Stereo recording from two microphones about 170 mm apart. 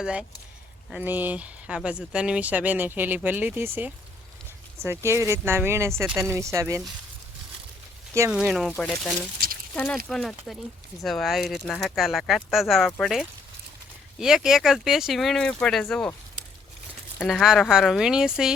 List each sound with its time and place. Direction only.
0.0 s speech: 5° right (ahead or behind)
4.8 s speech: 15° right (ahead or behind)
8.3 s speech: 5° right (ahead or behind)
17.2 s speech: centre (ahead or behind)